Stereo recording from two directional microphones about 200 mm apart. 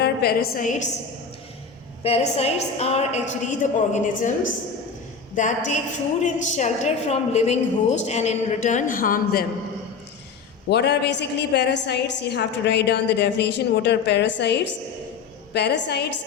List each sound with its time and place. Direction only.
0.0 s a woman's voice: 50° left (ahead or behind)
2.0 s a woman's voice: 30° left (ahead or behind); by 9.5 s 45° left (ahead or behind)
10.7 s a woman's voice: 55° left (ahead or behind)